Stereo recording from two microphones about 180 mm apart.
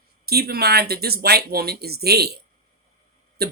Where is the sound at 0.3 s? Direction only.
60° right (ahead or behind).